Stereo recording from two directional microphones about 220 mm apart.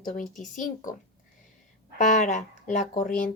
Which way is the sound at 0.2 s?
35° left (ahead or behind).